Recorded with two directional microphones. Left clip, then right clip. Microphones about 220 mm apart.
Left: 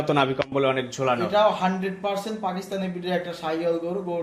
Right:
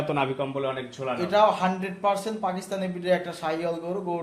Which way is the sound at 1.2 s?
40° right (ahead or behind).